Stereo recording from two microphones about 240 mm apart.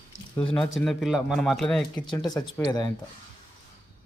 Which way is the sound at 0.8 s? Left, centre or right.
Centre.